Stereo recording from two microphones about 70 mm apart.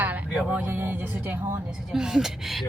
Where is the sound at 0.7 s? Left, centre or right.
Right.